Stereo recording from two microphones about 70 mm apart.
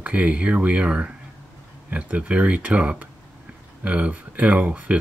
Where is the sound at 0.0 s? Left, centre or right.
Centre.